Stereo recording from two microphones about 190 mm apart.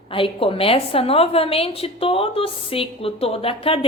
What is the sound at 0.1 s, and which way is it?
A woman's voice, 30° left (ahead or behind).